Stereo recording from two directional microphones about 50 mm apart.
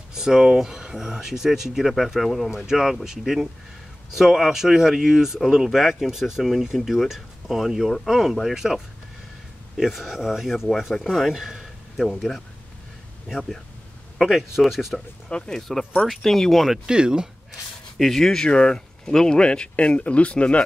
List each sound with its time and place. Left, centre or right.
0.1 s speech: centre
14.2 s speech: centre
15.2 s speech: centre
16.1 s speech: centre
16.8 s speech: centre
17.9 s speech: centre
18.4 s speech: centre